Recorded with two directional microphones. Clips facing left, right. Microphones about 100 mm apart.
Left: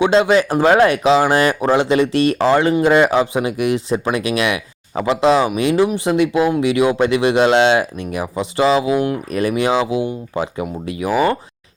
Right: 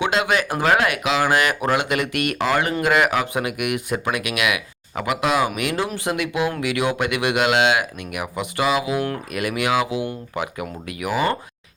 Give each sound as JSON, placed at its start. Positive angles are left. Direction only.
{"t": 0.0, "sound": "speech", "side_deg": 30}